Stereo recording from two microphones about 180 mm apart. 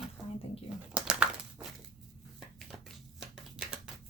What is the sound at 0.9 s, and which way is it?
Pigeon, 5° right (ahead or behind).